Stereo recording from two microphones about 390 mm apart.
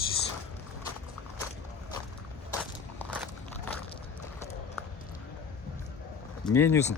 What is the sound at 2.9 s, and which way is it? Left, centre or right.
Biting, centre.